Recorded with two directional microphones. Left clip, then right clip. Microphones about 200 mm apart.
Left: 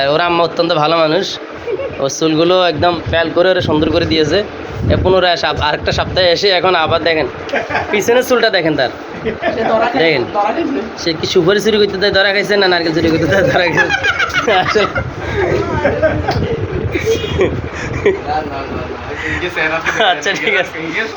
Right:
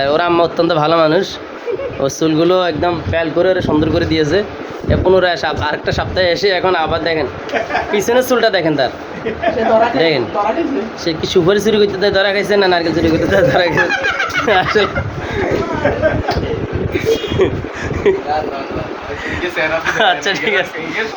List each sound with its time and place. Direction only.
0.0 s speech: 35° right (ahead or behind); by 8.9 s 10° right (ahead or behind)
10.0 s speech: 10° right (ahead or behind)
13.7 s speech: 25° left (ahead or behind)
14.4 s speech: 10° right (ahead or behind)
17.4 s speech: 15° right (ahead or behind)
19.8 s speech: 15° right (ahead or behind)